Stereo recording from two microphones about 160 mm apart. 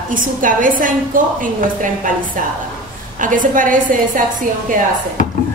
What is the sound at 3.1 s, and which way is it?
Speech, 55° right (ahead or behind).